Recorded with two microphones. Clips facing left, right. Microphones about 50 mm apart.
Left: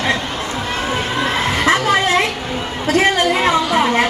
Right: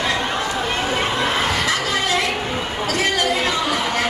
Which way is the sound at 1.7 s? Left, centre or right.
Left.